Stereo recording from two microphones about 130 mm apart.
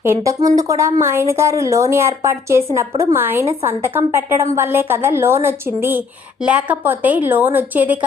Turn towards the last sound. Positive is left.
turn(degrees=-15)  # may be behind; listen again after turning